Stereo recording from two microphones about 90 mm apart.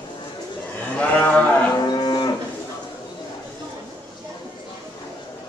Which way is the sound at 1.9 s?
55° left (ahead or behind).